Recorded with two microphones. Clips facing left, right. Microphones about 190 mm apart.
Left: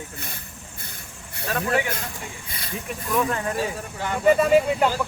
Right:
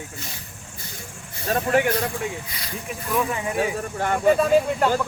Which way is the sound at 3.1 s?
5° right (ahead or behind).